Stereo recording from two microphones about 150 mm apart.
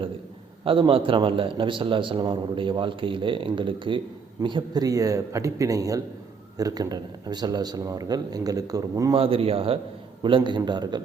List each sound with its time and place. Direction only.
0.6 s a man's voice: 35° right (ahead or behind)
9.1 s a man's voice: 40° right (ahead or behind)